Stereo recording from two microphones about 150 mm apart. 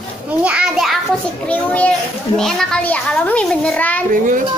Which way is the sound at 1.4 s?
10° left (ahead or behind).